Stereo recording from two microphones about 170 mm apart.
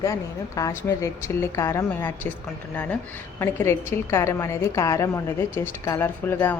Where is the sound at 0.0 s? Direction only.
20° left (ahead or behind).